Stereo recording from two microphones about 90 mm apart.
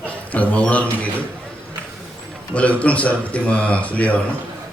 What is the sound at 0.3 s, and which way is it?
Speech, 15° left (ahead or behind).